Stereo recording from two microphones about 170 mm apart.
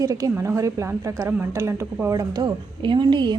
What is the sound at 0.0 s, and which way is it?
A woman's voice, 20° right (ahead or behind).